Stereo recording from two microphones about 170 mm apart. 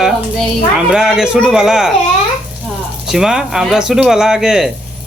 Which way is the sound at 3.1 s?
5° right (ahead or behind).